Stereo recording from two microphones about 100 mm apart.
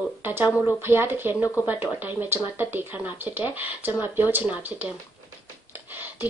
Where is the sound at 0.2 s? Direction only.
20° right (ahead or behind).